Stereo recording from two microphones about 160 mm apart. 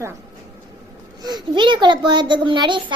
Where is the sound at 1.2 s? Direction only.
25° right (ahead or behind).